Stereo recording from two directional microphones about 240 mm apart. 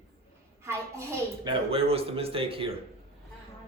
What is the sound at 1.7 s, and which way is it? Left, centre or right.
A man's voice, right.